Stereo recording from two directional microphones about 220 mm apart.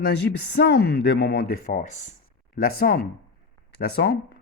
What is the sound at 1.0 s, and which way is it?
Speech, 50° left (ahead or behind).